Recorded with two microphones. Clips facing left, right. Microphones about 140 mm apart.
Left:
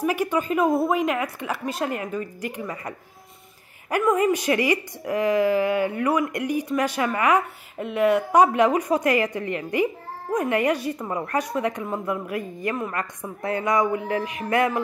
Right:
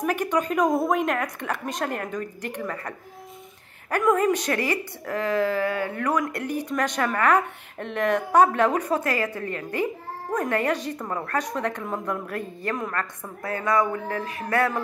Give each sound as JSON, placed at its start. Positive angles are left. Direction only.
{"t": 0.0, "sound": "a woman's voice", "side_deg": 5}
{"t": 4.0, "sound": "speech", "side_deg": 10}